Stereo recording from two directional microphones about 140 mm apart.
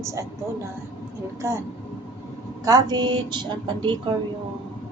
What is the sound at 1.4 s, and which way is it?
Speech, 20° right (ahead or behind).